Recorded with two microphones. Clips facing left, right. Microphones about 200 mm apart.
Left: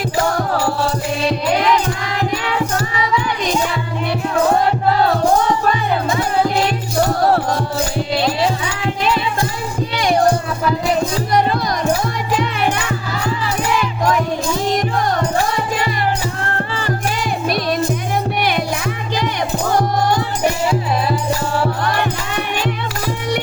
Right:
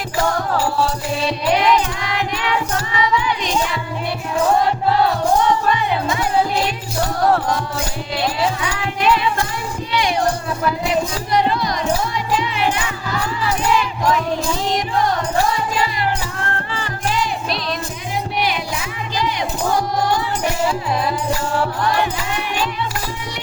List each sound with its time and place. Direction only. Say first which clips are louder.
7.2 s music: left 1 dB; 35° left (ahead or behind)
9.9 s music: left 3 dB; 45° left (ahead or behind)
11.3 s music: even; 50° left (ahead or behind)
17.1 s music: right 2 dB; 50° left (ahead or behind)